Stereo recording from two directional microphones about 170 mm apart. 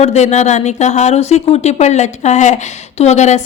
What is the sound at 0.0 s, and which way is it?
A woman's voice, 40° left (ahead or behind).